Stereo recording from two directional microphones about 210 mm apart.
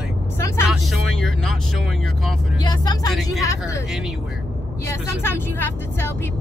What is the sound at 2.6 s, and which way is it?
Speech, 20° left (ahead or behind).